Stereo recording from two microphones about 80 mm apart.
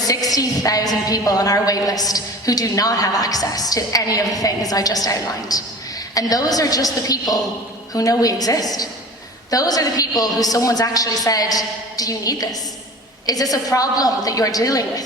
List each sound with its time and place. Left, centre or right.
0.0 s a woman's voice: left